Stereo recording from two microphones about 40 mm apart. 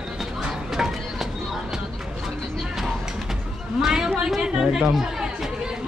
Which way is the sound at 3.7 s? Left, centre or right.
Centre.